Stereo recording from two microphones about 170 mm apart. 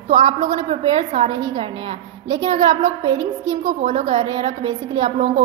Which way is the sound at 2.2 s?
25° right (ahead or behind).